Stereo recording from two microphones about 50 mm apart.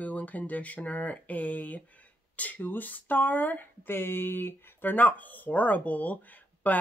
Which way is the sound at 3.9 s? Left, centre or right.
Left.